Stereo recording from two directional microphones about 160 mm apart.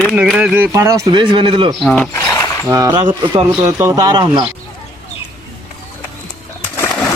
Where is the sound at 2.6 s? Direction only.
20° right (ahead or behind).